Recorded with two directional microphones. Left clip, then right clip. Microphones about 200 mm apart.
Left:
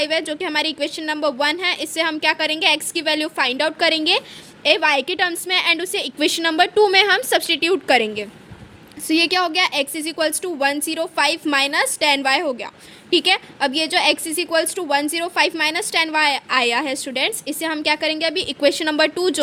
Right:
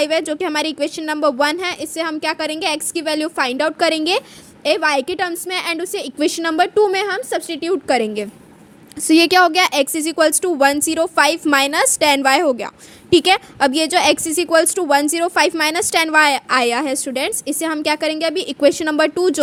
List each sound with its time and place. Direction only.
0.0 s a woman's voice: 35° right (ahead or behind)